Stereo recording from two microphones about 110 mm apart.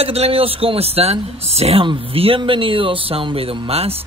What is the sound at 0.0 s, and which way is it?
Speech, 65° right (ahead or behind).